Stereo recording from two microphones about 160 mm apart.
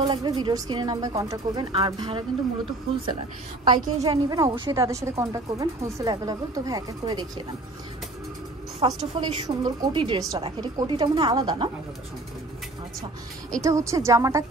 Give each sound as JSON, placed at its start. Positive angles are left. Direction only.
{"t": 0.1, "sound": "a woman's voice", "side_deg": -25}
{"t": 3.6, "sound": "a woman's voice", "side_deg": -25}
{"t": 8.8, "sound": "a woman's voice", "side_deg": -30}
{"t": 13.6, "sound": "a woman's voice", "side_deg": -20}